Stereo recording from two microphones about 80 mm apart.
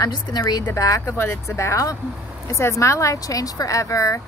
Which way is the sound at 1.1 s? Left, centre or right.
Left.